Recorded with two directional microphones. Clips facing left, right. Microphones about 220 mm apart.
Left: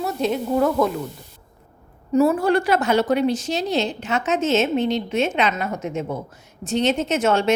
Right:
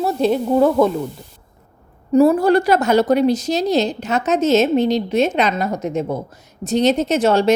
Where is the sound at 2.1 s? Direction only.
35° right (ahead or behind).